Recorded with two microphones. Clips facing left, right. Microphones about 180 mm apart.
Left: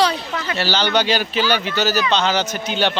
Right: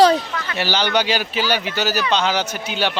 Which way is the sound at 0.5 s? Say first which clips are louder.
Even; 15° right (ahead or behind).